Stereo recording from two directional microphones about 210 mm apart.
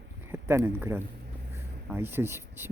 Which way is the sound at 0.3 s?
10° right (ahead or behind).